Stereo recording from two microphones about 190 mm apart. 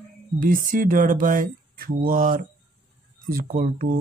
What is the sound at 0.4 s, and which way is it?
Speech, 45° right (ahead or behind).